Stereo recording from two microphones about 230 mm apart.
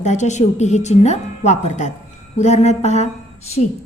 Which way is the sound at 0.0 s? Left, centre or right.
Left.